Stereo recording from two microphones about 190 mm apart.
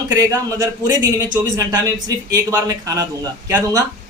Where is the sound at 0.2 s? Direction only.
20° right (ahead or behind).